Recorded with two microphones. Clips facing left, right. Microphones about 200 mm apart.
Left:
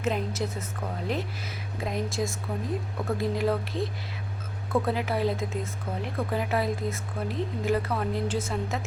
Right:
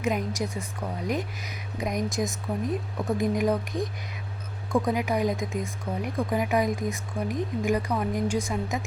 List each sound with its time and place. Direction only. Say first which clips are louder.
0.0 s a woman's voice: right 1 dB; 15° right (ahead or behind)